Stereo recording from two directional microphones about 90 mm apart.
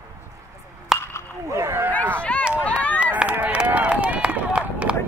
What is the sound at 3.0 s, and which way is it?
Run, 15° right (ahead or behind).